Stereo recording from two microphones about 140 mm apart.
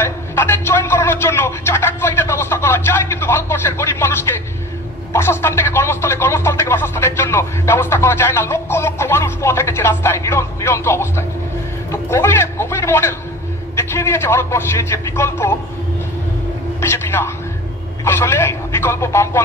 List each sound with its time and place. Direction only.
0.0 s a sound: 15° left (ahead or behind)
5.1 s speech: 15° left (ahead or behind)
11.9 s a sound: 20° left (ahead or behind)
13.7 s speech: 15° left (ahead or behind)
16.8 s vehicle: 15° left (ahead or behind)
18.0 s speech: 15° left (ahead or behind)